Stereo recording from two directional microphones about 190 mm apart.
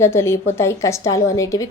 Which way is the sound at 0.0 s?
15° left (ahead or behind).